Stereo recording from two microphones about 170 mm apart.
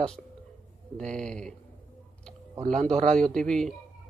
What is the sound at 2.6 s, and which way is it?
Speech, 50° right (ahead or behind).